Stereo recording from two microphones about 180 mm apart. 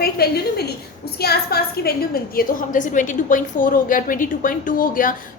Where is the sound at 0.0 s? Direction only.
60° left (ahead or behind).